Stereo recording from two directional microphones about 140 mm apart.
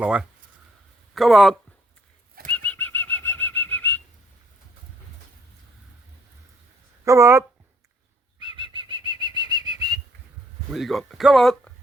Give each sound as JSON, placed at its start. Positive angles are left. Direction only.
{"t": 0.0, "sound": "speech", "side_deg": -5}
{"t": 2.5, "sound": "bird flight", "side_deg": 10}
{"t": 7.0, "sound": "speech", "side_deg": -20}
{"t": 8.4, "sound": "bird flight", "side_deg": -35}
{"t": 10.7, "sound": "speech", "side_deg": 0}